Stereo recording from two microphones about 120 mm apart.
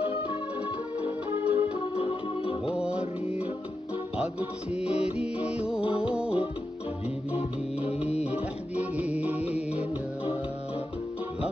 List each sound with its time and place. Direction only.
1.3 s music: 15° right (ahead or behind)
2.4 s music: 50° left (ahead or behind)
2.7 s music: 10° right (ahead or behind)
7.3 s music: 55° left (ahead or behind)
8.2 s music: 10° right (ahead or behind)